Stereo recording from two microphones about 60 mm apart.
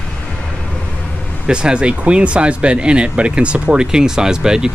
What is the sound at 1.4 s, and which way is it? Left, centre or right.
Speech, centre.